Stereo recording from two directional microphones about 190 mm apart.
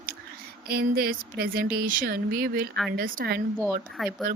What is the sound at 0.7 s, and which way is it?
Speech, 55° right (ahead or behind).